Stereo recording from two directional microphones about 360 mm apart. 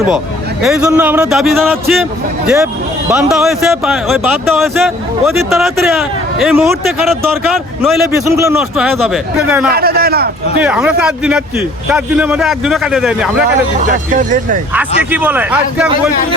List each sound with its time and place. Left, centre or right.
0.6 s speech: centre
3.1 s speech: centre
9.7 s a sound: right
10.6 s speech: centre
13.7 s speech: right
15.1 s speech: centre